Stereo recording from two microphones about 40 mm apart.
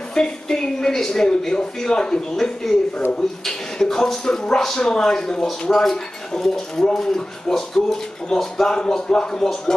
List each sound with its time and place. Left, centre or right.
0.1 s speech: centre
8.6 s speech: centre